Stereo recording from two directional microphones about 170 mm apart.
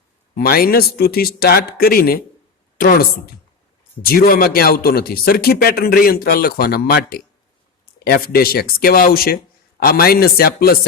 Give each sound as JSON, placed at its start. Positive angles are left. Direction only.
{"t": 0.3, "sound": "a woman's voice", "side_deg": 60}